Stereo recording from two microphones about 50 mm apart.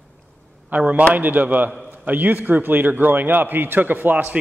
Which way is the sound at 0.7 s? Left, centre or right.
Right.